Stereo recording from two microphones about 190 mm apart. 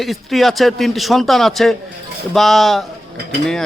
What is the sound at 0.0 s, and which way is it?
A man's voice, centre (ahead or behind).